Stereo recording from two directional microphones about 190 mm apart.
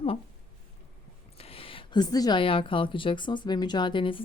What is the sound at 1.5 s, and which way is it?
Speech, 30° left (ahead or behind).